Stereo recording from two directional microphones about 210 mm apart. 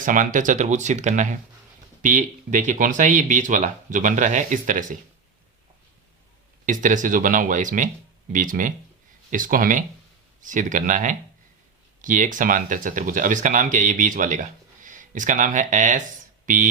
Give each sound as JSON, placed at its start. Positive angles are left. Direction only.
{"t": 0.0, "sound": "speech", "side_deg": -40}
{"t": 6.7, "sound": "speech", "side_deg": -40}